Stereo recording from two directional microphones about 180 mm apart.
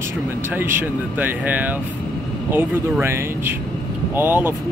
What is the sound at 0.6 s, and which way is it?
Speech, 10° right (ahead or behind).